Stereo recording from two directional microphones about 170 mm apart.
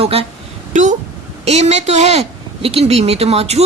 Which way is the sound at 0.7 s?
45° right (ahead or behind).